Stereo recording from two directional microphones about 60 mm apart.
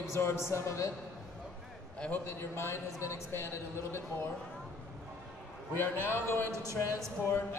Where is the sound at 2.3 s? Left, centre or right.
Left.